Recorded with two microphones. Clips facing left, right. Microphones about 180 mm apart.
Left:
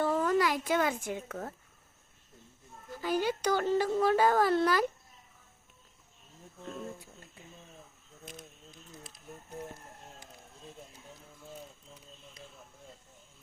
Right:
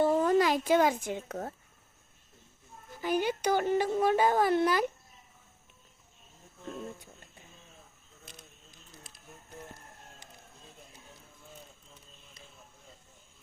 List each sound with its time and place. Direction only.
0.0 s a sound: 20° right (ahead or behind)
0.3 s speech: 25° right (ahead or behind)
3.0 s speech: 20° right (ahead or behind)